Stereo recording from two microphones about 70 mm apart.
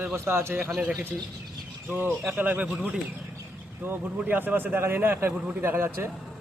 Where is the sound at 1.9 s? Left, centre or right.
Right.